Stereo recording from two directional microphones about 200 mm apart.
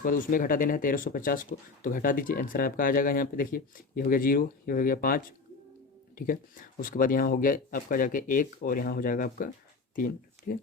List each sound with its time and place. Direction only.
0.0 s speech: 45° left (ahead or behind)